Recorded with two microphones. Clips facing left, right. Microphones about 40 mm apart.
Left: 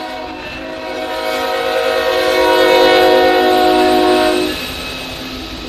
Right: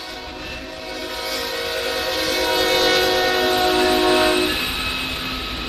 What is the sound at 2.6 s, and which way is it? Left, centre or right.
Train, left.